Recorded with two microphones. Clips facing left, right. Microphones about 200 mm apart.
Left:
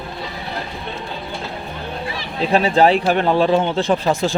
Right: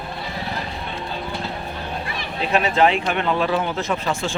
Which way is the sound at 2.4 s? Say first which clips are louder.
Left 4 dB; 35° left (ahead or behind).